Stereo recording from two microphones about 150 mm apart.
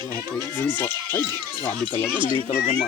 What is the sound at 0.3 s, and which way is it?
Speech, 15° left (ahead or behind).